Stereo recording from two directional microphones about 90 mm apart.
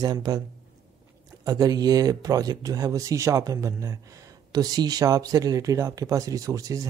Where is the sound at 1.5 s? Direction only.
45° right (ahead or behind).